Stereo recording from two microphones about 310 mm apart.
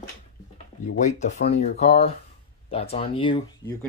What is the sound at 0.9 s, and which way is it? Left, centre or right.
Speech, left.